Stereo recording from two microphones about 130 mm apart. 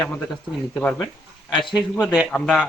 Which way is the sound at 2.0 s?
10° right (ahead or behind).